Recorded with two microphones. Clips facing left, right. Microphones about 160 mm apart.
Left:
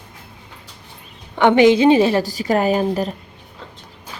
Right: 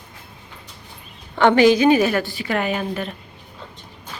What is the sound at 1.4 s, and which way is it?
Speech, 15° left (ahead or behind).